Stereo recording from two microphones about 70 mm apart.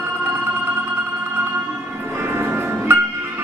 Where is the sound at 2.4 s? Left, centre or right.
Right.